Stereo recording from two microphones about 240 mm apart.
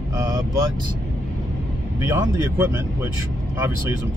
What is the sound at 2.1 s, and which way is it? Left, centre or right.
Speech, centre.